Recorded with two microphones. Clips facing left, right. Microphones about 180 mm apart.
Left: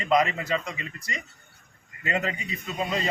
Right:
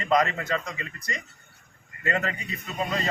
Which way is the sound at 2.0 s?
10° left (ahead or behind).